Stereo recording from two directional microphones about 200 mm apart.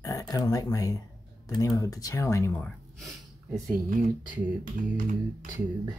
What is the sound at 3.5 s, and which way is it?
Speech, 15° right (ahead or behind).